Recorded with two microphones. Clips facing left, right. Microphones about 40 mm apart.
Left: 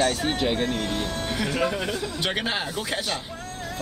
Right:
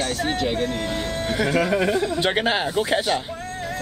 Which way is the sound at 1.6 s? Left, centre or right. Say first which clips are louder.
Right 4 dB; right.